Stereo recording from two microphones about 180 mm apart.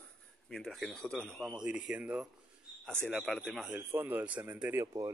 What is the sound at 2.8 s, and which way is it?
Speech, 5° left (ahead or behind).